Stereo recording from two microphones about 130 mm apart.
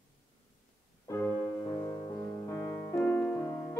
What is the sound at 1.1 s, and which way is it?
Music, 20° left (ahead or behind).